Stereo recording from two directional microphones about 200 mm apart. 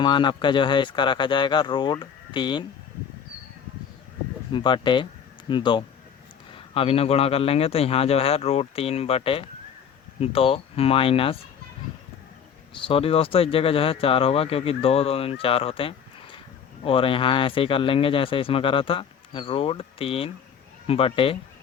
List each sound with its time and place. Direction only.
0.0 s speech: 25° left (ahead or behind)
4.5 s speech: 25° left (ahead or behind)
12.7 s speech: 30° left (ahead or behind)